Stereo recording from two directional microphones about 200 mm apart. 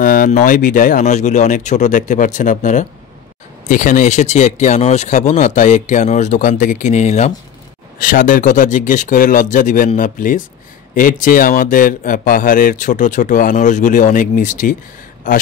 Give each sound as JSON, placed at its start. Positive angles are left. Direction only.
{"t": 0.0, "sound": "speech", "side_deg": 45}